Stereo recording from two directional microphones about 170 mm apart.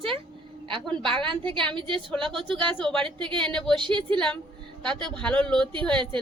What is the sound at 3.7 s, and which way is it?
Speech, 30° right (ahead or behind).